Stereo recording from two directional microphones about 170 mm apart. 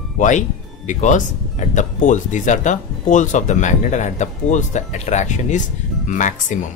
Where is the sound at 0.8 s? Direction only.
45° left (ahead or behind).